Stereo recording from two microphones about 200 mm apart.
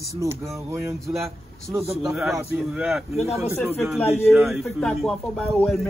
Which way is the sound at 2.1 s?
Centre (ahead or behind).